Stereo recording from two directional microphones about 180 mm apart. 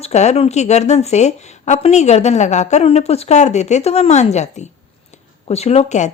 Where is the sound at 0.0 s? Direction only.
40° left (ahead or behind).